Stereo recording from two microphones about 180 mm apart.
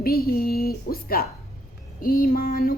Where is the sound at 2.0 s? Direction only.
50° left (ahead or behind).